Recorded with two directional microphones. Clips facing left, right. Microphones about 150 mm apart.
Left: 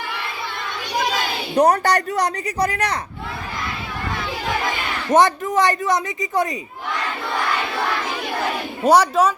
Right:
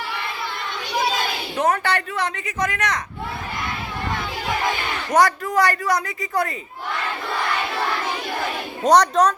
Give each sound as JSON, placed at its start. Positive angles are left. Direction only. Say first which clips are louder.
{"t": 1.5, "sound": "a woman's voice", "louder": "left 5 dB", "side_deg": 40}
{"t": 5.1, "sound": "speech", "louder": "left 2 dB", "side_deg": 20}
{"t": 8.8, "sound": "speech", "louder": "even", "side_deg": 5}